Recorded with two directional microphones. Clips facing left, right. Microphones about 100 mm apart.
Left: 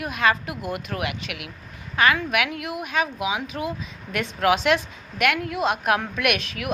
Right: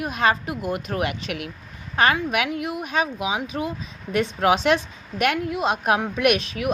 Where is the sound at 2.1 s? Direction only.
25° right (ahead or behind).